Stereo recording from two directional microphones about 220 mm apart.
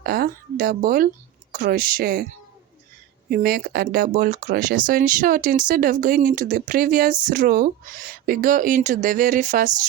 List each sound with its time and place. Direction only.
0.0 s a woman's voice: 45° right (ahead or behind)
3.2 s speech: 40° right (ahead or behind)